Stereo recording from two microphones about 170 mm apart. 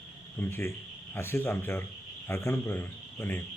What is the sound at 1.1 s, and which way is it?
Speech, 15° left (ahead or behind).